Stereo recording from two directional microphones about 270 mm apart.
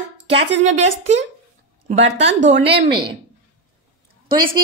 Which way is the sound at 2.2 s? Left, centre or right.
Right.